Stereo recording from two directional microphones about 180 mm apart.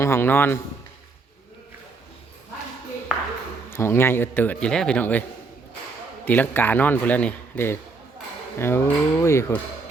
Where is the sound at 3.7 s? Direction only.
15° left (ahead or behind).